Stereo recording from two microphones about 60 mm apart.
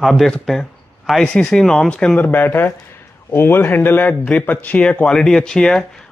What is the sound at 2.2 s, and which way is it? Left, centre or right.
Speech, left.